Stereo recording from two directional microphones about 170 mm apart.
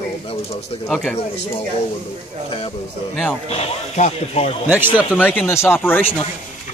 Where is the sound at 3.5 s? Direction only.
40° left (ahead or behind).